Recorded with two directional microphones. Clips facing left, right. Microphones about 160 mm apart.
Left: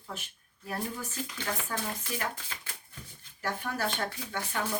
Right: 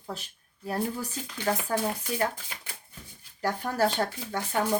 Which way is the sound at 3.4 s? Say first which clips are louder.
Right 7 dB; 35° right (ahead or behind).